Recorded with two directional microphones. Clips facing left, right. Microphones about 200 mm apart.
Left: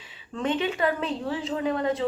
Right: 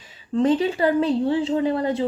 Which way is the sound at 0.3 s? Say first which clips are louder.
Right 7 dB; 35° right (ahead or behind).